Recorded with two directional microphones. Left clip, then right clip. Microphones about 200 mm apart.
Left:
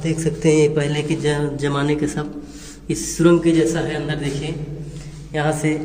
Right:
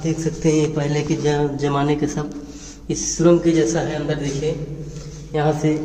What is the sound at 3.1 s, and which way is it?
Speech, 5° left (ahead or behind).